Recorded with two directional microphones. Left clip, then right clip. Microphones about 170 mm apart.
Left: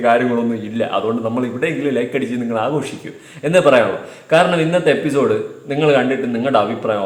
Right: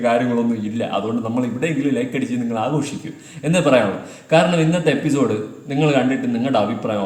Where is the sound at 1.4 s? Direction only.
5° right (ahead or behind).